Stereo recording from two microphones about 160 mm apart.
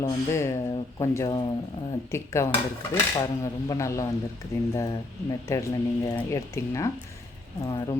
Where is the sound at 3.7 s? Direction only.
20° left (ahead or behind).